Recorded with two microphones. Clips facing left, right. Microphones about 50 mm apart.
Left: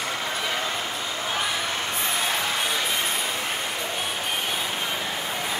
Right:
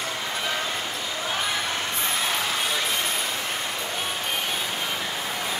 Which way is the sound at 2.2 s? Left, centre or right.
Centre.